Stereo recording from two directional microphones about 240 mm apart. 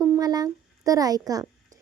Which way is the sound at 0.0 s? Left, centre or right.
Centre.